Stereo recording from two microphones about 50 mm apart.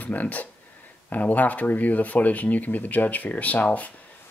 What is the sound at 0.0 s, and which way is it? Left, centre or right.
Speech, left.